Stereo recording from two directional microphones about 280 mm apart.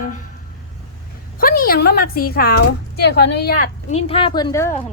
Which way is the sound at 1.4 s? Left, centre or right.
Left.